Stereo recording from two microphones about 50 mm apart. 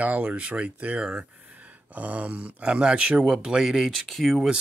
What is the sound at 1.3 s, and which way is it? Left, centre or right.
Speech, right.